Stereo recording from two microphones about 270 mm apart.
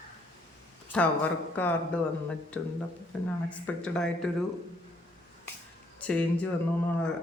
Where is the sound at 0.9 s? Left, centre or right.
Centre.